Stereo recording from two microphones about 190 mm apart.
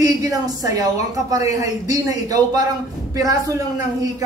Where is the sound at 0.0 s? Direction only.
20° right (ahead or behind).